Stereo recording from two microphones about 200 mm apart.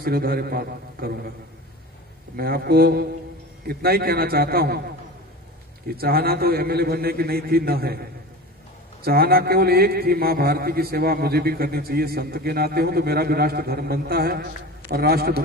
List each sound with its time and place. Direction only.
0.0 s a man's voice: 50° right (ahead or behind)
2.3 s a man's voice: 50° right (ahead or behind)